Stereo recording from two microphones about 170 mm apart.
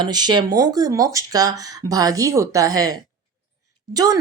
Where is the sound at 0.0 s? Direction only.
25° right (ahead or behind).